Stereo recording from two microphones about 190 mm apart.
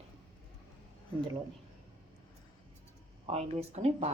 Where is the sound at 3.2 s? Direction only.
30° right (ahead or behind).